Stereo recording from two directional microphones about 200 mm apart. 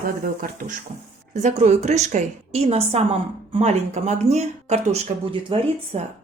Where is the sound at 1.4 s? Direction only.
35° right (ahead or behind).